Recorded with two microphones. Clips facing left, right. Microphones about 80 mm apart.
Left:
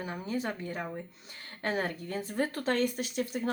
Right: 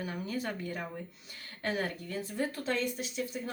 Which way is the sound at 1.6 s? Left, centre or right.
Left.